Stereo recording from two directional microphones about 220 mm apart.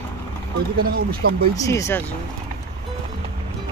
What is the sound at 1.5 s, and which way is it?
Speech, 15° left (ahead or behind).